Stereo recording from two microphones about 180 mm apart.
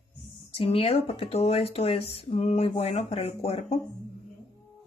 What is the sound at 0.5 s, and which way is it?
Speech, 30° left (ahead or behind).